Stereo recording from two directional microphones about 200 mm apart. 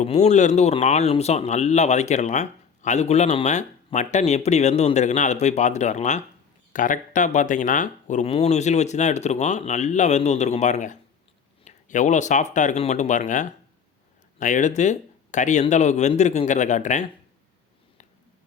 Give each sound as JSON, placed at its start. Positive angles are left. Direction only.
{"t": 0.0, "sound": "speech", "side_deg": 35}